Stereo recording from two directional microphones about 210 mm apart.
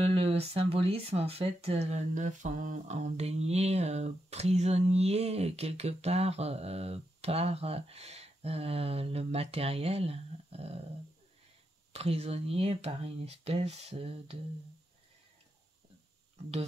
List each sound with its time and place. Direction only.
0.0 s speech: 30° right (ahead or behind)
11.9 s speech: 30° right (ahead or behind)